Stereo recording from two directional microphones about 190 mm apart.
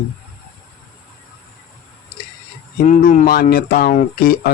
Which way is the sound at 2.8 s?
45° left (ahead or behind).